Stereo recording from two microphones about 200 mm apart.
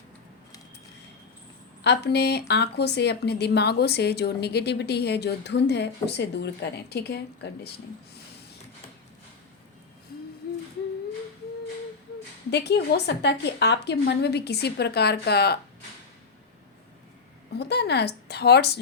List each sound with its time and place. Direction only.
1.8 s a woman's voice: 60° left (ahead or behind)
12.5 s a woman's voice: 55° left (ahead or behind)
17.5 s a woman's voice: 55° left (ahead or behind)